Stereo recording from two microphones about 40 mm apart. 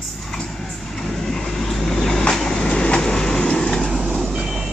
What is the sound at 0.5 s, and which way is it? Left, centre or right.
Vehicle, centre.